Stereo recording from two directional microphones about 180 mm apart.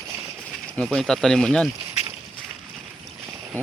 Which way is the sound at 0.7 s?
5° left (ahead or behind).